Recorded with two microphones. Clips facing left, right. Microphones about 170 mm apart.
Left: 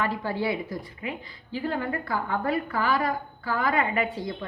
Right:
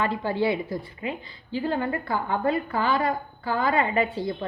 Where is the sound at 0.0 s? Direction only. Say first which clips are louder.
Right 3 dB; 25° right (ahead or behind).